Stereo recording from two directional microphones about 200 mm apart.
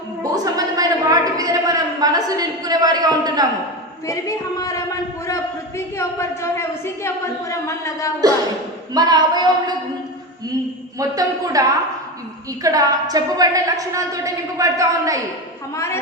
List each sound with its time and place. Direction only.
0.2 s a sound: 15° right (ahead or behind)
4.0 s a woman's voice: 15° left (ahead or behind)
8.9 s a woman's voice: 20° right (ahead or behind)
10.9 s a woman's voice: 15° right (ahead or behind)
15.7 s a woman's voice: 15° left (ahead or behind)